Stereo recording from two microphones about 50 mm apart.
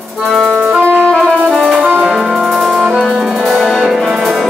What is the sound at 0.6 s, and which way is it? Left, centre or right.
Music, right.